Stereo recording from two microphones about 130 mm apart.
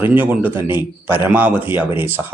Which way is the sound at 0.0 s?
15° right (ahead or behind).